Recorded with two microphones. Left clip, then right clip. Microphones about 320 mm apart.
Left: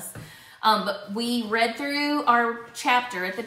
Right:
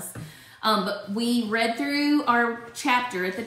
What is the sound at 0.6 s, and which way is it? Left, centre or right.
Speech, centre.